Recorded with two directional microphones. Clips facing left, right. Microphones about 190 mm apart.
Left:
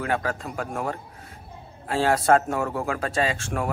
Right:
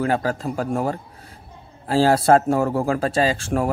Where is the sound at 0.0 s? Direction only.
35° right (ahead or behind).